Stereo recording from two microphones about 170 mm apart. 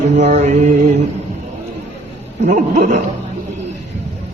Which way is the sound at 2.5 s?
45° right (ahead or behind).